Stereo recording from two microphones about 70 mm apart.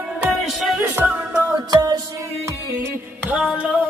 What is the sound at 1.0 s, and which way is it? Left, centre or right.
Music, right.